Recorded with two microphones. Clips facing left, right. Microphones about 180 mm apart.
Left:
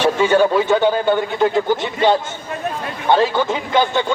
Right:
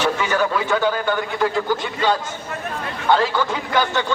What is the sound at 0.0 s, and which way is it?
A man's voice, 30° left (ahead or behind).